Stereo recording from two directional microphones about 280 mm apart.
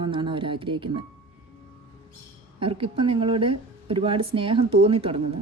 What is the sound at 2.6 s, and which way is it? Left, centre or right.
Speech, centre.